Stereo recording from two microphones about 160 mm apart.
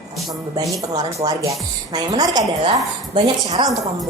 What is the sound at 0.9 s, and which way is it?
A woman's voice, 25° right (ahead or behind).